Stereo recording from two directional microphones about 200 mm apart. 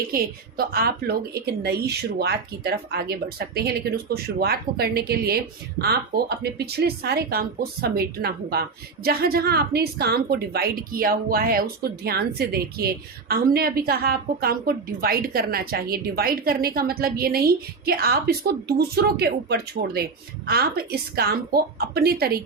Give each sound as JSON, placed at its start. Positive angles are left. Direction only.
{"t": 0.1, "sound": "a woman's voice", "side_deg": -50}